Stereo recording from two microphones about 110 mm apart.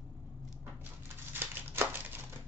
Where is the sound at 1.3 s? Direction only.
20° right (ahead or behind).